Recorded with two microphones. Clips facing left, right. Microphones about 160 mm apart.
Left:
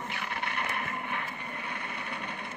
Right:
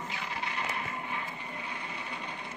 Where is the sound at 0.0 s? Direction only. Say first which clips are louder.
Left 1 dB; 60° left (ahead or behind).